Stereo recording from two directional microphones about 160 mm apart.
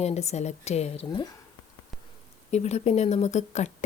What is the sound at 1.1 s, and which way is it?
Speech, 25° left (ahead or behind).